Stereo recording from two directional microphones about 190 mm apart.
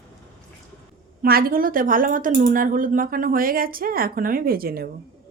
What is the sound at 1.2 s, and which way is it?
Speech, 50° right (ahead or behind).